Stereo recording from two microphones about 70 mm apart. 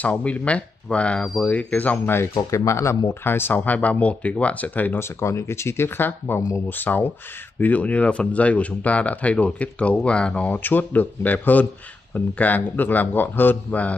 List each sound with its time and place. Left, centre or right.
0.0 s speech: left
2.5 s speech: left
3.1 s speech: left
4.9 s speech: left
6.7 s speech: left